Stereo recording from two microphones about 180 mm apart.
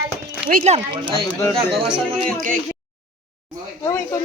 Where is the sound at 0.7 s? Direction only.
30° right (ahead or behind).